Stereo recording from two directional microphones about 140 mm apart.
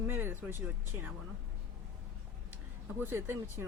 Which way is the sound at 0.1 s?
15° right (ahead or behind).